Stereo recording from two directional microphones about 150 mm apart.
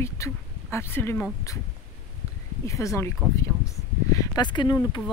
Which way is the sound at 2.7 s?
20° left (ahead or behind).